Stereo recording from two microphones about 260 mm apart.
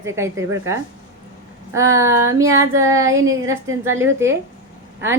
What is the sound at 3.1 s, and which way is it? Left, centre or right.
Speech, right.